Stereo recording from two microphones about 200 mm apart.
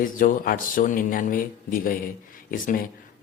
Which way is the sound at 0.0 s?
40° left (ahead or behind).